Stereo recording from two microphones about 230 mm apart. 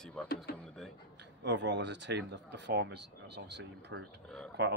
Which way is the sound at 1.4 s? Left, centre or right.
Right.